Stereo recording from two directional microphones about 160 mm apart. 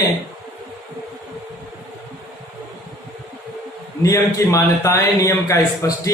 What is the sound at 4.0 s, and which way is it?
A man's voice, 20° left (ahead or behind).